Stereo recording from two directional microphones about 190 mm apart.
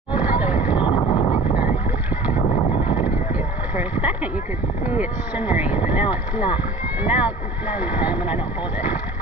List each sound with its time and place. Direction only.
0.2 s vehicle: 5° right (ahead or behind)
0.7 s vehicle: 25° left (ahead or behind)
2.3 s horse: 30° left (ahead or behind)
3.7 s a sound: 10° right (ahead or behind)
4.8 s speech: 10° right (ahead or behind)